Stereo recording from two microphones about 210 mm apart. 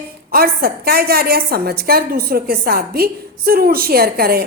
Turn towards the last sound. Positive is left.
turn(degrees=-45)  # may be behind; listen again after turning